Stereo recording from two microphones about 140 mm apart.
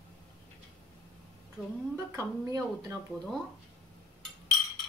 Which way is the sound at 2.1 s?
20° right (ahead or behind).